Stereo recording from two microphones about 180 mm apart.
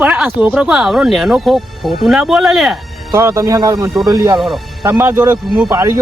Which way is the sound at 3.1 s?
15° right (ahead or behind).